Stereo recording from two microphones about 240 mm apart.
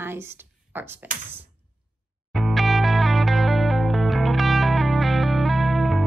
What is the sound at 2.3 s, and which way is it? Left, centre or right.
Music, centre.